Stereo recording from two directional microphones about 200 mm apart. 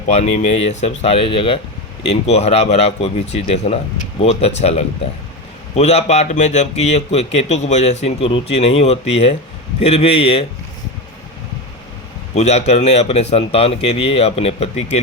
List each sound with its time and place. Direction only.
0.0 s a man's voice: 35° left (ahead or behind)
12.3 s speech: 35° left (ahead or behind)